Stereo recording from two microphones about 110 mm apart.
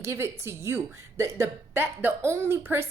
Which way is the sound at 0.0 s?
25° right (ahead or behind).